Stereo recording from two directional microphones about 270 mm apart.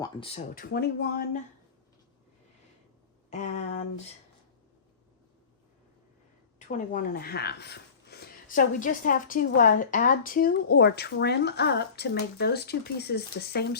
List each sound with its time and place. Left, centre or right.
0.0 s speech: centre
3.3 s speech: left
6.6 s speech: left